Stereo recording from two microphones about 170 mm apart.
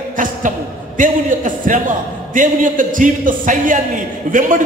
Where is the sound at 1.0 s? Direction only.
50° right (ahead or behind).